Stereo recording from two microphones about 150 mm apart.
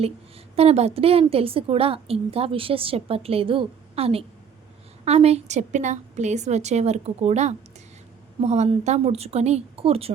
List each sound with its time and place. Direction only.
0.5 s a woman's voice: 45° right (ahead or behind)